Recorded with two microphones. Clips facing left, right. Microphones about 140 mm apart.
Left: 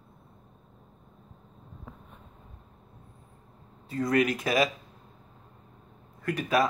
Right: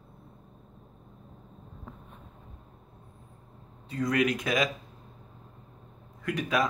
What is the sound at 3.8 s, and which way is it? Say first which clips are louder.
Speech: left 1 dB; centre (ahead or behind).